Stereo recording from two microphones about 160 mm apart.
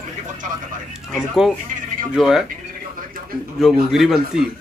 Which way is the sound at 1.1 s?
Centre (ahead or behind).